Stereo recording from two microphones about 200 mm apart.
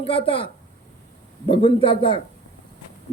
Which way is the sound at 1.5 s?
25° left (ahead or behind).